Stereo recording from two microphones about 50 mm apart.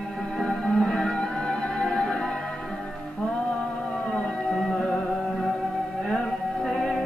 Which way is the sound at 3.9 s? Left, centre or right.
Left.